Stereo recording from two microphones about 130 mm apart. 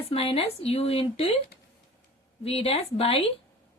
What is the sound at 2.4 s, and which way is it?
Speech, 50° left (ahead or behind).